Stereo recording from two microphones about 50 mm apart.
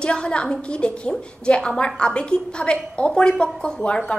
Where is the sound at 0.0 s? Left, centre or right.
Centre.